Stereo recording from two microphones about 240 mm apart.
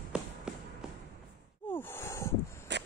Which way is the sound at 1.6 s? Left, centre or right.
Centre.